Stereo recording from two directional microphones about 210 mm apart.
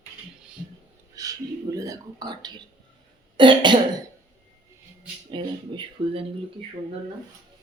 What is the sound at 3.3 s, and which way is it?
Cough, 25° right (ahead or behind).